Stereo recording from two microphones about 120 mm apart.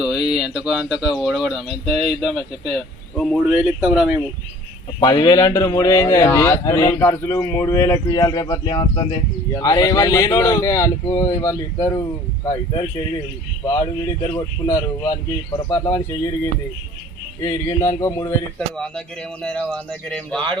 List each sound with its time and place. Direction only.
0.0 s speech: 5° right (ahead or behind)
3.4 s speech: 10° right (ahead or behind)
4.9 s speech: 35° left (ahead or behind)
14.3 s speech: 30° left (ahead or behind)
18.8 s speech: 10° left (ahead or behind)